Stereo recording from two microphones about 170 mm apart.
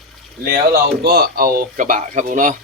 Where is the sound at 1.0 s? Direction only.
65° right (ahead or behind); by 2.5 s 50° right (ahead or behind).